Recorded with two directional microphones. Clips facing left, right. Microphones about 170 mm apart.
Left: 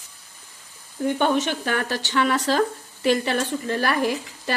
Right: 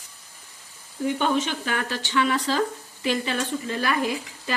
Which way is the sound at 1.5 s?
45° left (ahead or behind).